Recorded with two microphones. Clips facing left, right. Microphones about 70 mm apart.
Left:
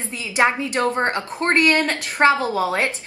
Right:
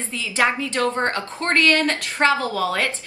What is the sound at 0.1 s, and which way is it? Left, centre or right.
A woman's voice, left.